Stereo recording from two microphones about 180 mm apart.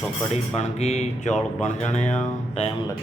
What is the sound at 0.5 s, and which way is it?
Speech, 35° left (ahead or behind).